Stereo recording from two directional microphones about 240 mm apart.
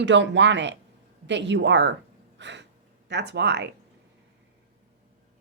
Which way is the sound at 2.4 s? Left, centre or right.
Right.